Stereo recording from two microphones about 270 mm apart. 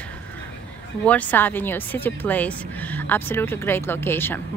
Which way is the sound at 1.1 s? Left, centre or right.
Centre.